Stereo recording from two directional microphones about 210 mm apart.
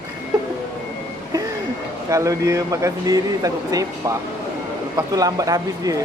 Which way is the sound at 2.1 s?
15° right (ahead or behind).